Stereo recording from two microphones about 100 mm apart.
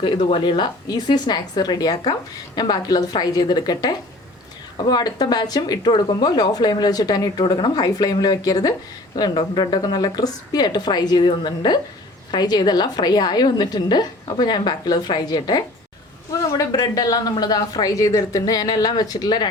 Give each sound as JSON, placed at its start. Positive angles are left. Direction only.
{"t": 0.3, "sound": "speech", "side_deg": 55}